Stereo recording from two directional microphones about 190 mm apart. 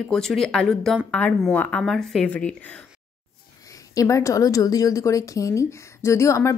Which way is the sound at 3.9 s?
15° left (ahead or behind).